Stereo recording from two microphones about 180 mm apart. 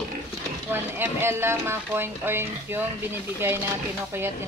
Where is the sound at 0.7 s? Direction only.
10° right (ahead or behind).